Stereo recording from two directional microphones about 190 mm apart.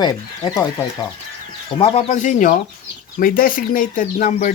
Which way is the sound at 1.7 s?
30° left (ahead or behind).